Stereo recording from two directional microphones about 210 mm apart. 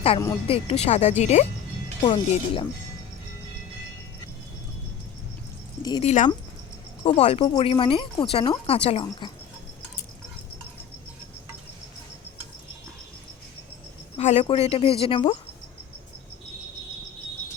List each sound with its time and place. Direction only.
0.4 s speech: 30° left (ahead or behind)
2.0 s speech: 20° left (ahead or behind)
5.8 s speech: 20° left (ahead or behind)
6.1 s speech: 35° left (ahead or behind)
14.2 s speech: 30° left (ahead or behind)